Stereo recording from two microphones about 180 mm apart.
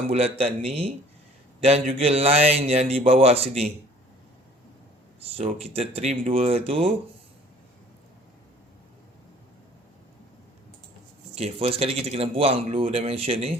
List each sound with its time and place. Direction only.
0.1 s speech: 35° right (ahead or behind)
1.6 s speech: 35° right (ahead or behind)
5.2 s speech: 35° right (ahead or behind)
11.3 s speech: 35° right (ahead or behind)